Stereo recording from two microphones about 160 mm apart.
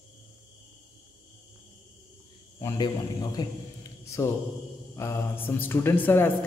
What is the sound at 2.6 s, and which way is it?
Speech, 25° left (ahead or behind).